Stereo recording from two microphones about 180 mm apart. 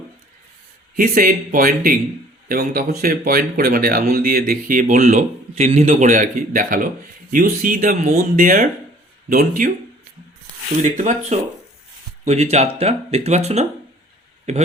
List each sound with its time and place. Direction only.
0.9 s speech: 50° right (ahead or behind)
10.8 s speech: 40° right (ahead or behind)